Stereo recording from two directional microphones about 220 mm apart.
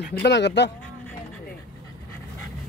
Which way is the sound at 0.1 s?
50° left (ahead or behind).